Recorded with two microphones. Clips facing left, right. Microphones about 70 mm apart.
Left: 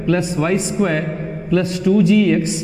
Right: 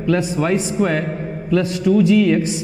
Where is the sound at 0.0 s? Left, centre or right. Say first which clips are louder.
Even; centre.